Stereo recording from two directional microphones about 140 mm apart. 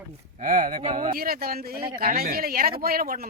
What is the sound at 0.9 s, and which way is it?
Speech, 80° right.